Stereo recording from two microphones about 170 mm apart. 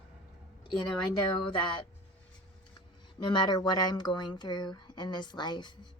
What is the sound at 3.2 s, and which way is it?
Speech, 25° left (ahead or behind).